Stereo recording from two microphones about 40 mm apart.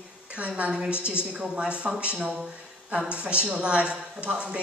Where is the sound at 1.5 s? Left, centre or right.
Right.